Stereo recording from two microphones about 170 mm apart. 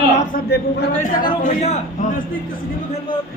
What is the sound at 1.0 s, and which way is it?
A man's voice, 50° left (ahead or behind).